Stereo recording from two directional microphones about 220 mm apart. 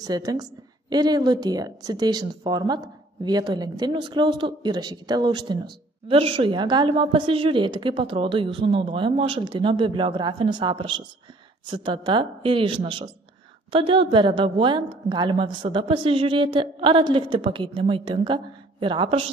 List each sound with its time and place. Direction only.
0.0 s a woman's voice: 15° right (ahead or behind)